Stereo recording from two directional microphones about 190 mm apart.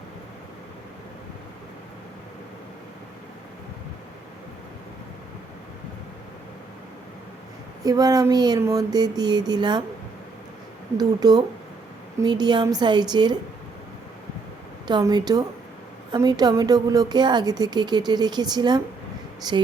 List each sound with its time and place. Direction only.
7.9 s a woman's voice: 20° right (ahead or behind)
10.9 s a woman's voice: 20° right (ahead or behind)
14.8 s a woman's voice: 20° right (ahead or behind)